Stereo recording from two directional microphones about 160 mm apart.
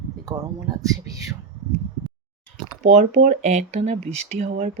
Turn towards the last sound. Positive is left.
turn(degrees=-45)  # may be behind; listen again after turning